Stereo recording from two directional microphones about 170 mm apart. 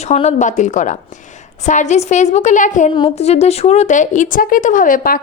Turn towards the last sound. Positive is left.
turn(degrees=55)  # may be behind; listen again after turning